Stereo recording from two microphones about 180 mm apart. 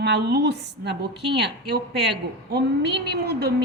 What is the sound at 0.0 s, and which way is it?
Speech, 70° right (ahead or behind).